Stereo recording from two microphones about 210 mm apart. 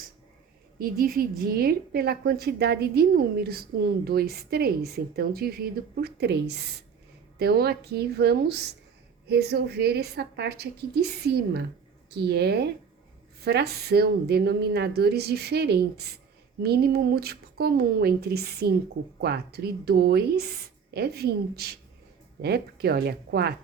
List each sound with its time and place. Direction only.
0.8 s a woman's voice: 45° right (ahead or behind)